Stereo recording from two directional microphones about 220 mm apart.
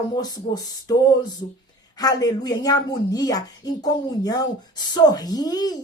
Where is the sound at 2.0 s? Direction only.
15° left (ahead or behind).